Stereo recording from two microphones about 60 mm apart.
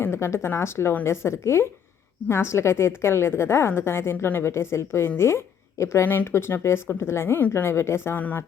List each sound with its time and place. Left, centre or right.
0.0 s a woman's voice: left
5.8 s speech: left
6.1 s a woman's voice: left
8.1 s speech: left